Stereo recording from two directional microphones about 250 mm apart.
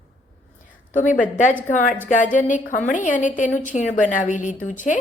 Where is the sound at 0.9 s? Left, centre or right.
Left.